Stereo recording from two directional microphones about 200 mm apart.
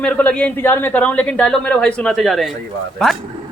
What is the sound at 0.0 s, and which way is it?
Speech, 5° left (ahead or behind).